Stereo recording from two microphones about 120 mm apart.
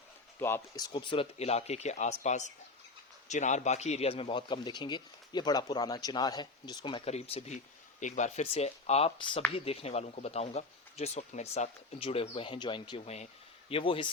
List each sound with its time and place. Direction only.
0.3 s speech: 20° left (ahead or behind)
0.8 s a man's voice: 45° left (ahead or behind)
7.0 s speech: 60° left (ahead or behind)